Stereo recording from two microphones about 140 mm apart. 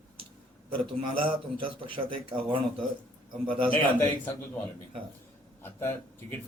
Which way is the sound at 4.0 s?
15° left (ahead or behind).